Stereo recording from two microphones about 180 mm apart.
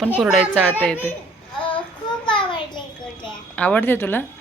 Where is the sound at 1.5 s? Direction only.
30° left (ahead or behind).